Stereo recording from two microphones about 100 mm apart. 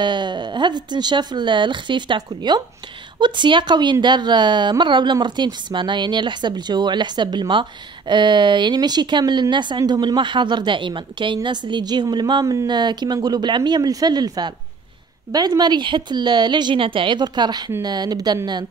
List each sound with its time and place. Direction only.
0.0 s speech: 50° right (ahead or behind)